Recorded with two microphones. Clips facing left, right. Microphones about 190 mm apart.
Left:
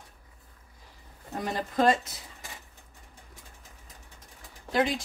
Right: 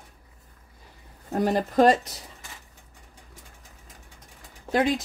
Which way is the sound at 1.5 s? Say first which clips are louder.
Right 5 dB; 45° right (ahead or behind).